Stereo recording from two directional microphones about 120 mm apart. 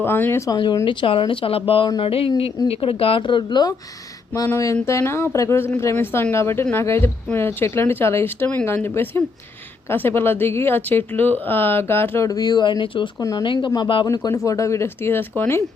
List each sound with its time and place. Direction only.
0.0 s speech: 20° left (ahead or behind)
0.5 s speech: 35° left (ahead or behind)
4.4 s speech: 25° left (ahead or behind)
12.3 s speech: 35° left (ahead or behind)
13.1 s speech: 30° left (ahead or behind)
14.1 s speech: 30° left (ahead or behind)